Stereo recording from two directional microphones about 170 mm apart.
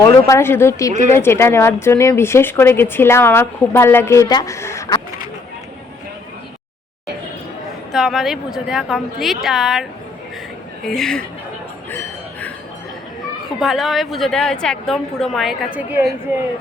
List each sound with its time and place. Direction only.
0.0 s speech: 15° left (ahead or behind)
7.9 s a woman's voice: centre (ahead or behind)
10.8 s a woman's voice: 5° left (ahead or behind)
11.9 s a sound: 10° left (ahead or behind)
13.6 s a woman's voice: centre (ahead or behind)